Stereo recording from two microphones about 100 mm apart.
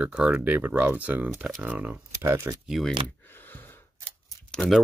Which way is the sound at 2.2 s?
30° right (ahead or behind).